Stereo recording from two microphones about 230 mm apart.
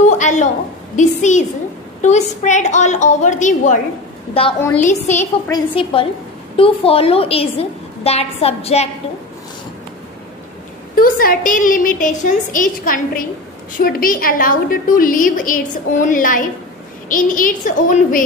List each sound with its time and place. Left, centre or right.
0.0 s a sound: left
0.9 s a woman's voice: left
4.6 s a woman's voice: centre
4.8 s a woman's voice: left
11.0 s a woman's voice: left